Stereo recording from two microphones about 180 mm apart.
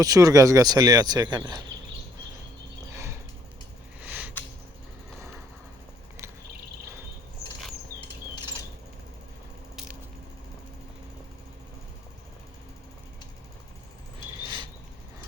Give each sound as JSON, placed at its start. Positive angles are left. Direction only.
{"t": 0.0, "sound": "speech", "side_deg": -20}
{"t": 2.9, "sound": "a sound", "side_deg": -15}
{"t": 14.4, "sound": "cricket", "side_deg": -25}